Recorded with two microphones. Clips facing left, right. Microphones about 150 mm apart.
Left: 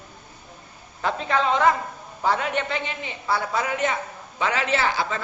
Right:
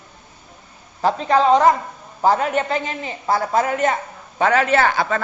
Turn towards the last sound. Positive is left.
turn(degrees=-55)  # may be behind; listen again after turning